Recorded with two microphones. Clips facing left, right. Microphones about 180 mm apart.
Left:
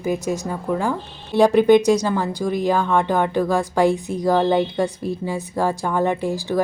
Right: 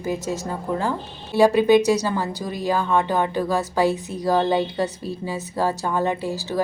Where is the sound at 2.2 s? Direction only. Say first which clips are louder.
Left 5 dB; 15° left (ahead or behind).